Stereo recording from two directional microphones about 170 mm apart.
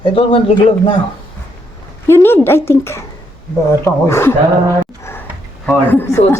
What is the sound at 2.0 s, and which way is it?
A woman's voice, 15° left (ahead or behind).